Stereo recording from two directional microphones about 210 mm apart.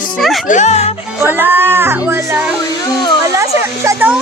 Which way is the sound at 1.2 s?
10° right (ahead or behind).